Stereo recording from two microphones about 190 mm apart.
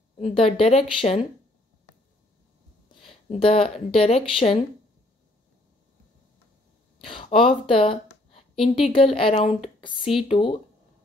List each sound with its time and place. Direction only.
0.2 s speech: 30° left (ahead or behind)
3.3 s speech: 30° left (ahead or behind)
7.0 s a woman's voice: 30° left (ahead or behind)